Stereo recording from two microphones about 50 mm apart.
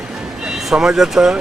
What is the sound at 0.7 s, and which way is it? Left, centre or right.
Speech, centre.